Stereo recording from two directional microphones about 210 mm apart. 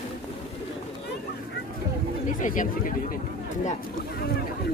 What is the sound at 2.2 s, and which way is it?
Speech, 40° left (ahead or behind).